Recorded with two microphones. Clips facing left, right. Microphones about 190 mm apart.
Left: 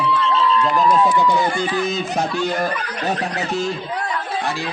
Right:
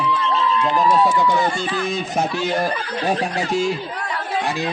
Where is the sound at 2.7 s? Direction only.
30° right (ahead or behind).